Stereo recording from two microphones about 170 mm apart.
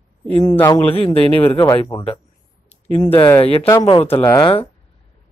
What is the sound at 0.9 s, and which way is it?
Speech, 35° left (ahead or behind).